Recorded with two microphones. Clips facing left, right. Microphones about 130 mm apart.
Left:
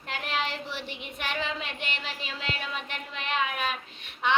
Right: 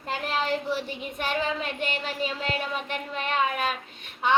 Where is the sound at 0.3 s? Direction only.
45° right (ahead or behind).